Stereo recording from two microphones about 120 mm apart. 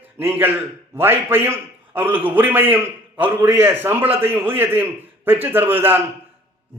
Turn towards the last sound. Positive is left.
turn(degrees=-15)  # may be behind; listen again after turning